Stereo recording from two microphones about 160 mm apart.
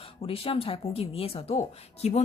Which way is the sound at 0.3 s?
35° left (ahead or behind).